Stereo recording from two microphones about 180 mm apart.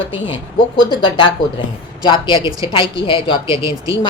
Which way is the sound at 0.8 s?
25° left (ahead or behind).